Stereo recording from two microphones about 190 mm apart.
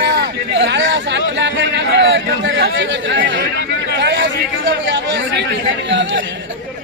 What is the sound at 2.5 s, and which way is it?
Speech, 60° right (ahead or behind).